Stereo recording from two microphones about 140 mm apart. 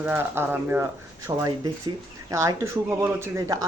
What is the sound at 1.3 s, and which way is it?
Speech, 25° right (ahead or behind).